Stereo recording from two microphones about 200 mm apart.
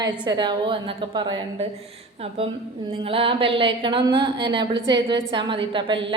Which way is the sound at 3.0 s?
25° right (ahead or behind).